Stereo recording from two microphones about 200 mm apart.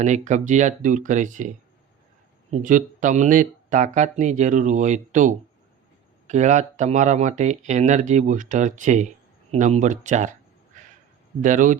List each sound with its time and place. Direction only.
0.0 s speech: 35° right (ahead or behind)
10.7 s a sound: 40° right (ahead or behind)
11.4 s speech: 40° right (ahead or behind)